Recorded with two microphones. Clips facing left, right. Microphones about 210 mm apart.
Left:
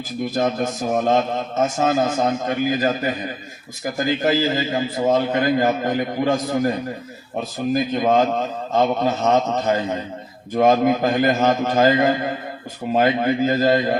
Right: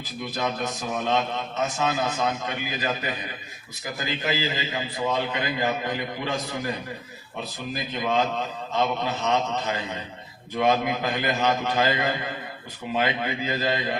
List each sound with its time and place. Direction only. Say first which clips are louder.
0.3 s a man's voice: left 7 dB; 45° left (ahead or behind)